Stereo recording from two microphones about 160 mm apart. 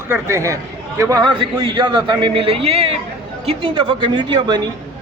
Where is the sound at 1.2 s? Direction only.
30° right (ahead or behind).